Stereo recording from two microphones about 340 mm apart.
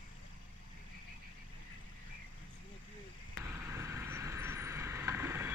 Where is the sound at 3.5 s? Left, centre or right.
Centre.